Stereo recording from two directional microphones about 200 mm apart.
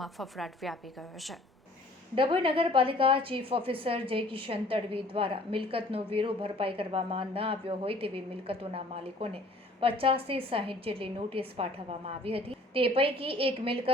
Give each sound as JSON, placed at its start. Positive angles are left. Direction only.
{"t": 0.0, "sound": "a woman's voice", "side_deg": 0}
{"t": 2.1, "sound": "a woman's voice", "side_deg": -25}